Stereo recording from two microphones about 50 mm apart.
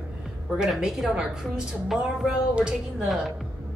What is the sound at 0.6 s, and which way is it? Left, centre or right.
Speech, centre.